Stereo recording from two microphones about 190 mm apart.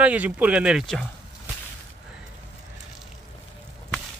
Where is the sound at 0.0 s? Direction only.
10° right (ahead or behind).